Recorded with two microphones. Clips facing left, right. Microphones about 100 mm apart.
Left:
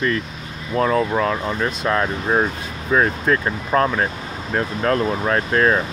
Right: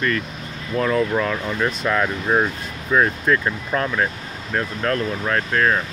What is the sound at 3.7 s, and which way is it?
Speech, 25° left (ahead or behind).